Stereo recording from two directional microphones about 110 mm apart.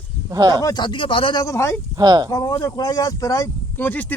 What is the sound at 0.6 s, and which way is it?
Speech, 40° left (ahead or behind).